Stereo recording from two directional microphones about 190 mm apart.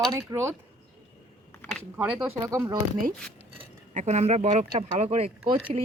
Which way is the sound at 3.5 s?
35° right (ahead or behind).